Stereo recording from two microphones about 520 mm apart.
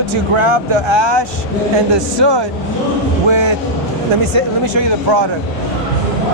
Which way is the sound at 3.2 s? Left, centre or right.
Right.